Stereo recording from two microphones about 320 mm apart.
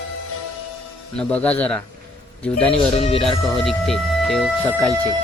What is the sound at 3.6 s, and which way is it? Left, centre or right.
Speech, centre.